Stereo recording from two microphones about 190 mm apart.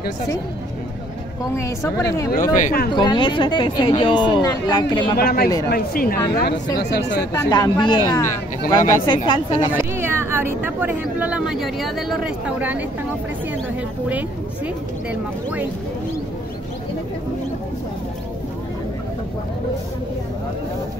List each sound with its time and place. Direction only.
1.6 s speech: 15° left (ahead or behind)
2.5 s a woman's voice: 45° left (ahead or behind)
2.9 s speech: 25° left (ahead or behind)
5.1 s a woman's voice: 55° left (ahead or behind)
7.3 s speech: 20° left (ahead or behind)
9.9 s speech: 10° right (ahead or behind)